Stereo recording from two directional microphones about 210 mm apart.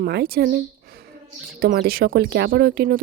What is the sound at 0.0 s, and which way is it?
Speech, 45° right (ahead or behind).